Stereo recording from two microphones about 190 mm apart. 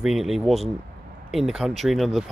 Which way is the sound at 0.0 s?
Centre (ahead or behind).